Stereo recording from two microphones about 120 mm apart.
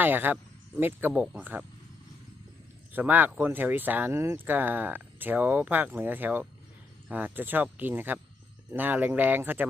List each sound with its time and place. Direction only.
0.0 s speech: 15° right (ahead or behind)
2.9 s speech: 15° right (ahead or behind)